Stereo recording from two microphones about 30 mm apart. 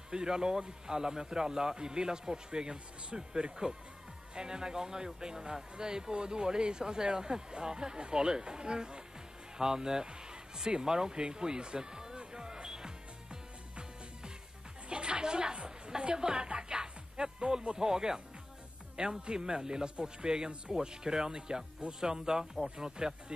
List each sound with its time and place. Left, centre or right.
0.1 s a man's voice: right
12.3 s music: right
14.9 s a sound: right
17.7 s a man's voice: right